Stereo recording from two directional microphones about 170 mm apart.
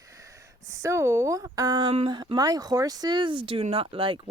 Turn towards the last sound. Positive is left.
turn(degrees=-30)  # may be behind; listen again after turning